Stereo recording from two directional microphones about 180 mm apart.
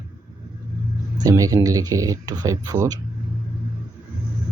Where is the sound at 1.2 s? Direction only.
20° right (ahead or behind).